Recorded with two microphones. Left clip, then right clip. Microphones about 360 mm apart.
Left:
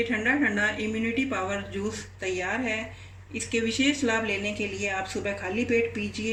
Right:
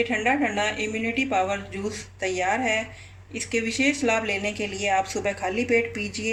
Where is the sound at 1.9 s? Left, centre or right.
Centre.